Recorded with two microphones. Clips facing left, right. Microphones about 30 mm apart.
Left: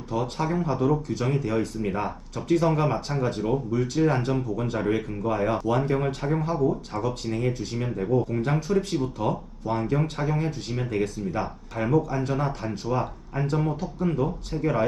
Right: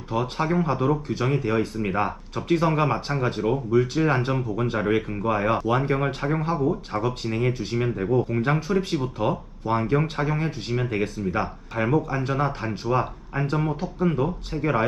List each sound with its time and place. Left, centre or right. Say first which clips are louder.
0.1 s speech: right 2 dB; right